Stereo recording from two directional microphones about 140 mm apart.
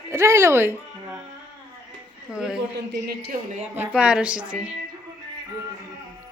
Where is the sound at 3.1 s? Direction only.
85° right.